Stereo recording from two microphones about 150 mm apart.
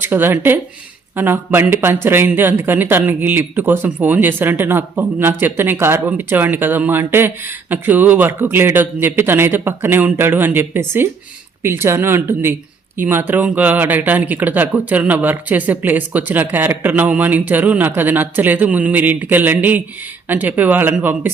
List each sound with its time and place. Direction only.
0.0 s speech: 15° right (ahead or behind)